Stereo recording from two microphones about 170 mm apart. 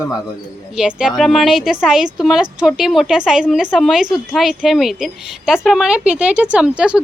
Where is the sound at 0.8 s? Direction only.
5° right (ahead or behind).